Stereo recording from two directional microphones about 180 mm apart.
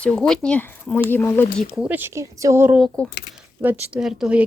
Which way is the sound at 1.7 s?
5° right (ahead or behind).